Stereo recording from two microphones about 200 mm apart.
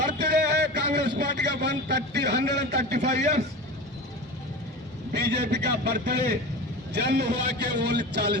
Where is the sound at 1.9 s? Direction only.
60° right (ahead or behind).